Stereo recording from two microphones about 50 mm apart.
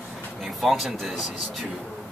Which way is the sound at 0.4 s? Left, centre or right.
Centre.